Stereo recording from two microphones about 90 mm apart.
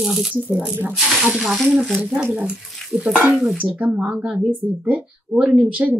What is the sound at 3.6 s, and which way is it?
Speech, 15° right (ahead or behind).